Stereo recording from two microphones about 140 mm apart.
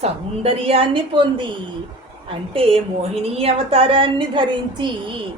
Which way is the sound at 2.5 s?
40° right (ahead or behind).